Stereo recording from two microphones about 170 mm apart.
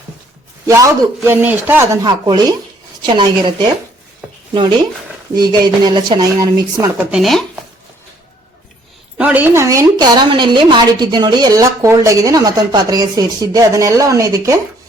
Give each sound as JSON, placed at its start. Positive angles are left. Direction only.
{"t": 0.7, "sound": "speech", "side_deg": -20}
{"t": 2.0, "sound": "a woman's voice", "side_deg": -25}
{"t": 5.3, "sound": "a woman's voice", "side_deg": -25}
{"t": 7.1, "sound": "speech", "side_deg": 0}
{"t": 9.1, "sound": "a woman's voice", "side_deg": -10}